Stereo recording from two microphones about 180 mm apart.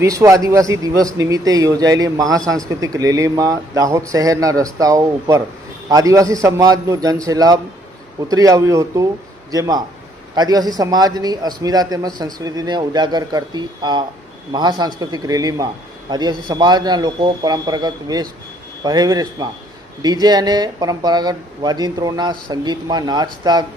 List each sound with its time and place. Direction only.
0.0 s a man's voice: 15° right (ahead or behind)